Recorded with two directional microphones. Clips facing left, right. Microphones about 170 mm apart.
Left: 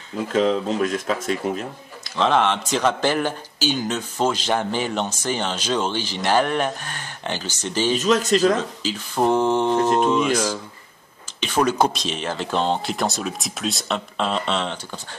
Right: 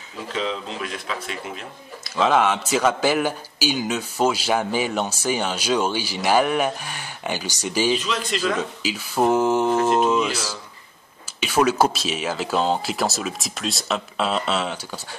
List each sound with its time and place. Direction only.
0.3 s speech: 45° left (ahead or behind)
2.0 s a man's voice: 5° right (ahead or behind)
7.9 s speech: 45° left (ahead or behind)
8.5 s a man's voice: 10° right (ahead or behind)